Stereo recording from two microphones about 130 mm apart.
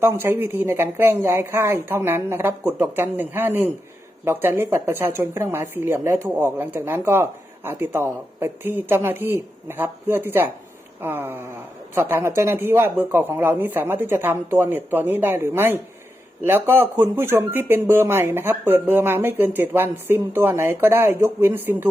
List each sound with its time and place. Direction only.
0.0 s speech: 15° right (ahead or behind)